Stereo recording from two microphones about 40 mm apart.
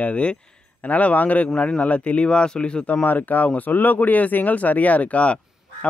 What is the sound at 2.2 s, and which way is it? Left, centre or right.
Speech, left.